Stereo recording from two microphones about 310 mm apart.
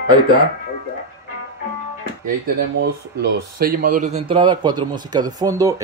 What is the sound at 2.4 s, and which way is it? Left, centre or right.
A man's voice, right.